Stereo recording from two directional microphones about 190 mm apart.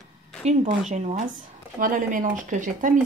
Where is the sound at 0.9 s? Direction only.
40° right (ahead or behind).